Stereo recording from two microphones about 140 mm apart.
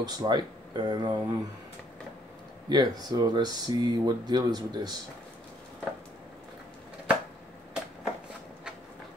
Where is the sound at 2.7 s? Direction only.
30° right (ahead or behind).